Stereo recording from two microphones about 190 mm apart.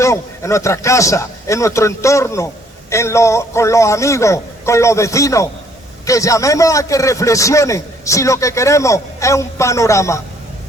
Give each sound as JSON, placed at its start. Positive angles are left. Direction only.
{"t": 0.0, "sound": "a man's voice", "side_deg": 15}